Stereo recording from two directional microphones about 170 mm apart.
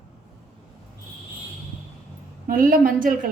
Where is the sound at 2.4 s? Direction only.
55° right (ahead or behind).